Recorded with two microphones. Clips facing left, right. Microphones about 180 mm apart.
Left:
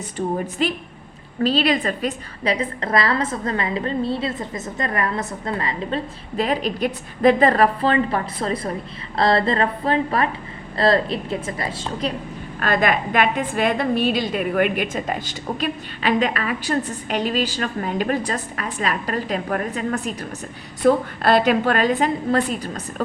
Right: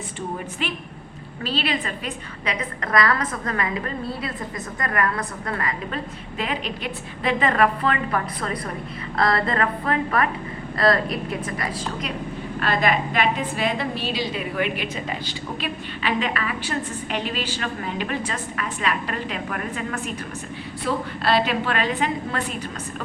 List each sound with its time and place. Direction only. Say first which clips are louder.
0.6 s a woman's voice: left 6 dB; 40° left (ahead or behind)
12.5 s a woman's voice: left 2 dB; 50° left (ahead or behind)
20.8 s a woman's voice: left 8 dB; 50° left (ahead or behind)